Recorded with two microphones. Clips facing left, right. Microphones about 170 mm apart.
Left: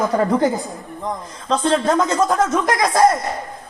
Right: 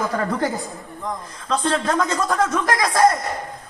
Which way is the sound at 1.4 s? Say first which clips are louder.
Left 4 dB; 25° left (ahead or behind).